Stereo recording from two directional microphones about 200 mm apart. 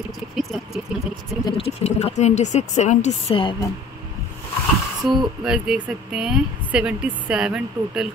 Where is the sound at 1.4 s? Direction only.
30° left (ahead or behind).